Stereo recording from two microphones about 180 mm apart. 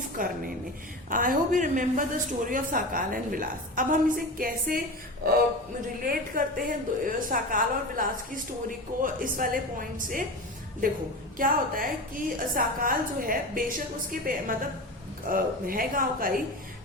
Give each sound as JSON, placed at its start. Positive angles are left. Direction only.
{"t": 0.2, "sound": "a woman's voice", "side_deg": -50}
{"t": 6.1, "sound": "a woman's voice", "side_deg": -50}
{"t": 11.3, "sound": "a woman's voice", "side_deg": -50}